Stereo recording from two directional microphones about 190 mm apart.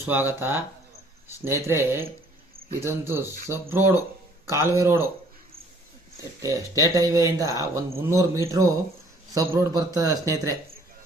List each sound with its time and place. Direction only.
0.0 s speech: 10° right (ahead or behind)
6.4 s speech: 15° right (ahead or behind)